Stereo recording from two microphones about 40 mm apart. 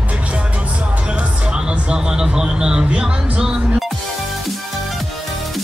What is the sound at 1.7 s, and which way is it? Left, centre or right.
Music, right.